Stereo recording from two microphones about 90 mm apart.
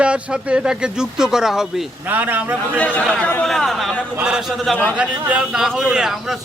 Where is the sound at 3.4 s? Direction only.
5° left (ahead or behind).